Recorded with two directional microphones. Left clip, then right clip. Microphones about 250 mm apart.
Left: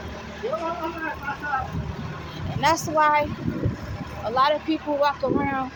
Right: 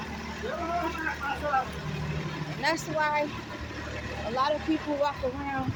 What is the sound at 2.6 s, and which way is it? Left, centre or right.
Speech, left.